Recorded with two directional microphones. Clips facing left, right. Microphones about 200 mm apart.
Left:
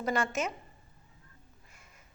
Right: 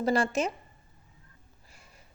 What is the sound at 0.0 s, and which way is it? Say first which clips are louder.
Speech: right 5 dB; 30° right (ahead or behind).